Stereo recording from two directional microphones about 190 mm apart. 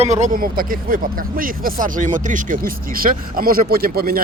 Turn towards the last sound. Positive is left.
turn(degrees=-50)  # may be behind; listen again after turning